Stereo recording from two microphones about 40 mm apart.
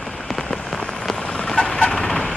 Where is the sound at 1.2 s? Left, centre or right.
Left.